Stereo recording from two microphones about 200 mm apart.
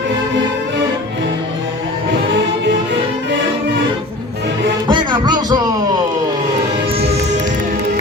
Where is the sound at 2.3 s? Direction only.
65° right (ahead or behind).